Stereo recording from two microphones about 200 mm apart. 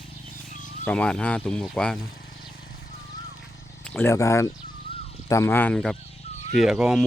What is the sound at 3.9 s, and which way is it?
Speech, 10° left (ahead or behind).